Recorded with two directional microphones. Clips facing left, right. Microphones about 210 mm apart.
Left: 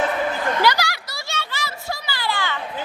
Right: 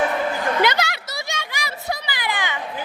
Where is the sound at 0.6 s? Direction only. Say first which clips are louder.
Even; 20° right (ahead or behind).